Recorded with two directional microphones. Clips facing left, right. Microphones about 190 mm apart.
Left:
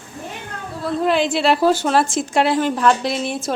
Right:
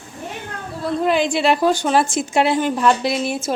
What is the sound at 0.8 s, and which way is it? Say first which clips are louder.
A woman's voice: even; centre (ahead or behind).